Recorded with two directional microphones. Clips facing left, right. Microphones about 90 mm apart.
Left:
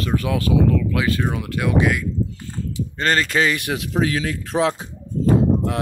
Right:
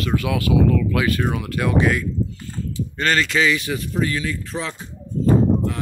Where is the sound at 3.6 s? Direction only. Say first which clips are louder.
Left 2 dB; 60° left (ahead or behind).